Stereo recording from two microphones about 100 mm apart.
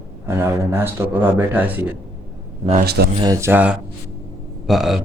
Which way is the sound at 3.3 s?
30° right (ahead or behind).